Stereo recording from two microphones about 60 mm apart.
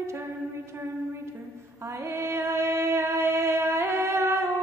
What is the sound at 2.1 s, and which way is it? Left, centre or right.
Music, right.